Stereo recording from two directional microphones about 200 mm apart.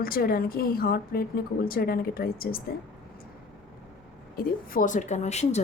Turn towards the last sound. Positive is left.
turn(degrees=35)  # may be behind; listen again after turning